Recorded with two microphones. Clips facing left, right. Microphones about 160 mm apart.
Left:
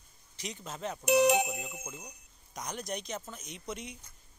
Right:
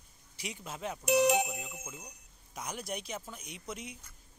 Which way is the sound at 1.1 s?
65° left (ahead or behind).